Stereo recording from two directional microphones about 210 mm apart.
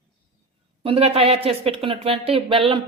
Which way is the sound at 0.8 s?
25° right (ahead or behind).